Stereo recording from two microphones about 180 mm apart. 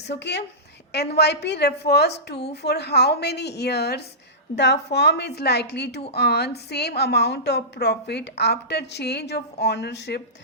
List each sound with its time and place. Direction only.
0.1 s a woman's voice: 70° left (ahead or behind)